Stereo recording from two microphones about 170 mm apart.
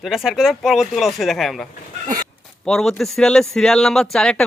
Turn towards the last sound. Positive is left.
turn(degrees=5)  # may be behind; listen again after turning